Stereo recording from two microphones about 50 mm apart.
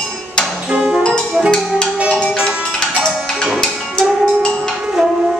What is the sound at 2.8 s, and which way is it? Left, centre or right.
Music, centre.